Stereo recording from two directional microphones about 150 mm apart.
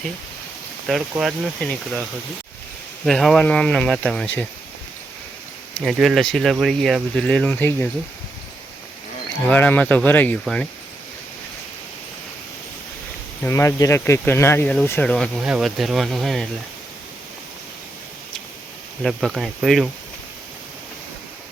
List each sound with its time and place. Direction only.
0.9 s speech: 5° left (ahead or behind)
3.1 s speech: 5° left (ahead or behind)
5.7 s speech: centre (ahead or behind)
9.5 s speech: 10° left (ahead or behind)
13.4 s speech: 20° left (ahead or behind)
15.4 s speech: 5° right (ahead or behind)
19.0 s speech: centre (ahead or behind)